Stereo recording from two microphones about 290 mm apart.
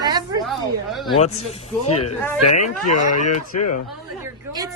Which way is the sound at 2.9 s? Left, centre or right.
Left.